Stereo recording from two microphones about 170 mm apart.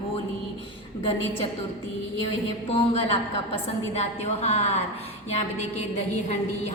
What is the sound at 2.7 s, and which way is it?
A woman's voice, 30° left (ahead or behind).